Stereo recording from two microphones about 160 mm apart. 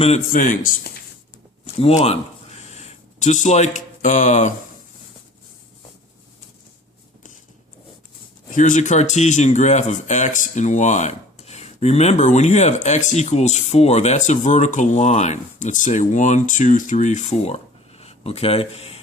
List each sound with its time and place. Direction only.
0.0 s speech: 50° left (ahead or behind)
1.6 s a sound: 40° left (ahead or behind)
8.5 s speech: 55° left (ahead or behind)